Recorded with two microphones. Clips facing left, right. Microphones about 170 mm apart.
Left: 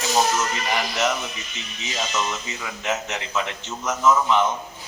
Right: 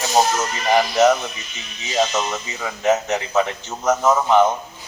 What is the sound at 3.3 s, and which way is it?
Speech, 55° right (ahead or behind).